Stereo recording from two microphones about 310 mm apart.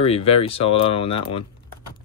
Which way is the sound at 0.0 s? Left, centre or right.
Centre.